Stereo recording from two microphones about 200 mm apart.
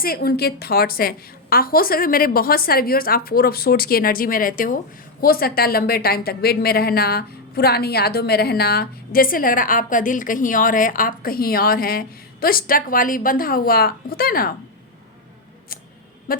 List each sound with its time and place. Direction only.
0.0 s a woman's voice: 50° left (ahead or behind)